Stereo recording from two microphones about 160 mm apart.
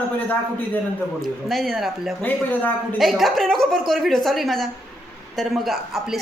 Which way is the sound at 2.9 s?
Centre (ahead or behind).